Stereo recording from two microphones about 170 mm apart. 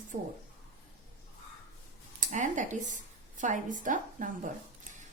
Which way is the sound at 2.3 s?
45° right (ahead or behind).